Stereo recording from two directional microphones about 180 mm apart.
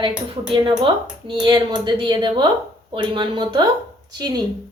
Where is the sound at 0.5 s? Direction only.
25° right (ahead or behind).